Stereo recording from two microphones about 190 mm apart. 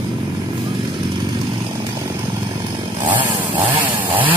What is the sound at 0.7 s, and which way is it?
Vehicle, 25° right (ahead or behind).